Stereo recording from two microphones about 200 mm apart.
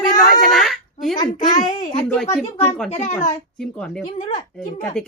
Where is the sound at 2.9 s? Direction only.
35° left (ahead or behind).